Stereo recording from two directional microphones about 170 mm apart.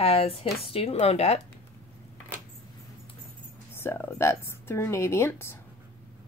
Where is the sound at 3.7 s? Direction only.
15° left (ahead or behind).